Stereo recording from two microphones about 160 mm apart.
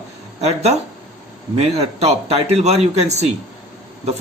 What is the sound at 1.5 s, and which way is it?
Speech, 40° right (ahead or behind).